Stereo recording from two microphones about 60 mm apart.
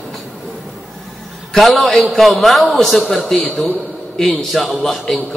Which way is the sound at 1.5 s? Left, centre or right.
Centre.